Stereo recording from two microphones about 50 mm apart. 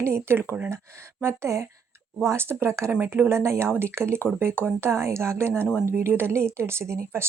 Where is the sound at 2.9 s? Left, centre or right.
Right.